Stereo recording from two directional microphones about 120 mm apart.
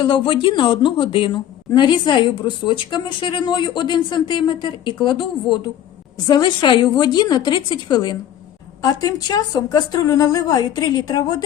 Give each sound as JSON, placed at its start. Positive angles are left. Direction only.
{"t": 0.0, "sound": "a woman's voice", "side_deg": 45}